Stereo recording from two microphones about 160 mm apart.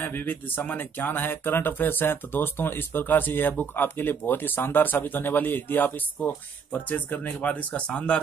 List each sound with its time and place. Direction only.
0.0 s speech: 10° left (ahead or behind)